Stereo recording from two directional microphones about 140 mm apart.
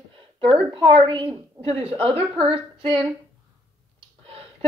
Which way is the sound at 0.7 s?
35° right (ahead or behind).